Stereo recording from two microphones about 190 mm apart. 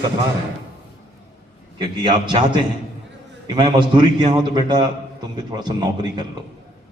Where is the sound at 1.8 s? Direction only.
25° right (ahead or behind).